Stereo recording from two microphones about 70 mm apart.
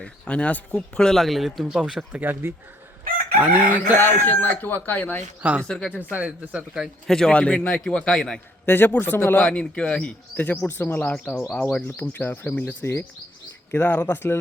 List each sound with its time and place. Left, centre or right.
0.0 s speech: centre
1.0 s speech: centre
1.6 s speech: centre
2.2 s speech: right
3.9 s speech: left
5.4 s speech: centre
5.6 s a man's voice: centre
6.1 s speech: right
7.1 s a man's voice: centre
8.6 s speech: left
9.4 s a man's voice: centre
12.1 s speech: left
12.8 s speech: left